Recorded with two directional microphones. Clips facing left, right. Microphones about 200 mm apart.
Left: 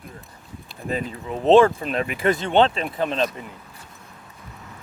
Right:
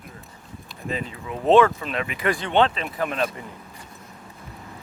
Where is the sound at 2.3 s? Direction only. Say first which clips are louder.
Left 2 dB; 25° left (ahead or behind).